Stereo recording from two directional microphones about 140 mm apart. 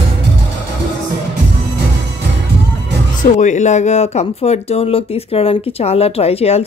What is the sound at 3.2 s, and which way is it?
Speech, 60° left (ahead or behind).